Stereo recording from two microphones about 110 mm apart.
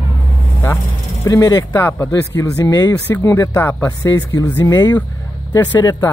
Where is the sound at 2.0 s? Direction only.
35° left (ahead or behind).